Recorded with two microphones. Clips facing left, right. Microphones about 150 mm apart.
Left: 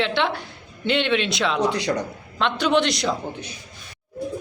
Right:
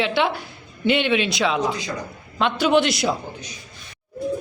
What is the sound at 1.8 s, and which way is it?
Speech, 75° left (ahead or behind).